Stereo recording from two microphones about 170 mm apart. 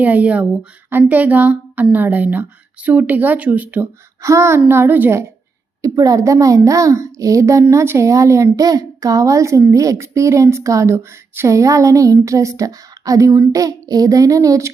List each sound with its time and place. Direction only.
0.0 s a child's voice: 10° right (ahead or behind)